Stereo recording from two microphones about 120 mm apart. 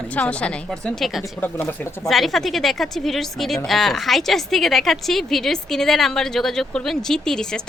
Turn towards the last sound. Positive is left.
turn(degrees=5)  # may be behind; listen again after turning